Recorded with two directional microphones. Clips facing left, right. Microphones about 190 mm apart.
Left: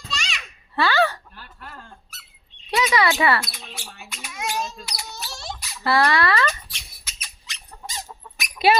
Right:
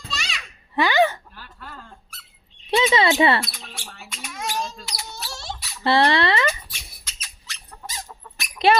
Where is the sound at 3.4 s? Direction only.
Centre (ahead or behind).